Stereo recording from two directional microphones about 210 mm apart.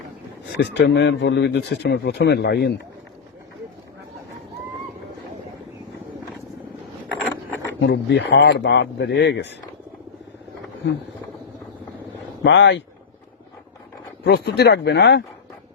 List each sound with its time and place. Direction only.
0.6 s speech: 55° left (ahead or behind)
7.8 s speech: 60° left (ahead or behind)
12.4 s speech: 60° left (ahead or behind)
14.3 s speech: 55° left (ahead or behind)